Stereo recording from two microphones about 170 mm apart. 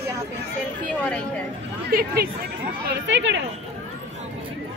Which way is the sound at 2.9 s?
90° right.